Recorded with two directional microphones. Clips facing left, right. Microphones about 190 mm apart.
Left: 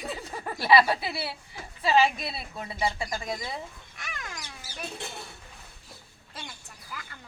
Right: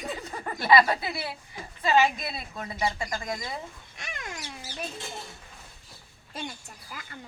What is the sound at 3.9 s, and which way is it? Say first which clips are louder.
Bird: right 2 dB; 25° right (ahead or behind).